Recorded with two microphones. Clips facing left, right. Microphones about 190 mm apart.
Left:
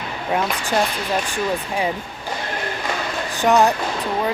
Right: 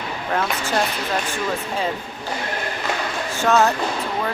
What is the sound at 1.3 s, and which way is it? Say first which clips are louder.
Speech: left 2 dB; 15° left (ahead or behind).